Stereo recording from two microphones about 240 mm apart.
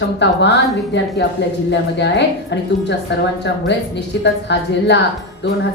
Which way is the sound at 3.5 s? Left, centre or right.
Left.